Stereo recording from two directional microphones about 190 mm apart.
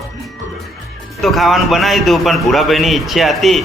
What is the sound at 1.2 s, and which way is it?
A man's voice, centre (ahead or behind).